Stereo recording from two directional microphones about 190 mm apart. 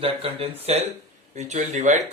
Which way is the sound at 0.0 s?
30° right (ahead or behind).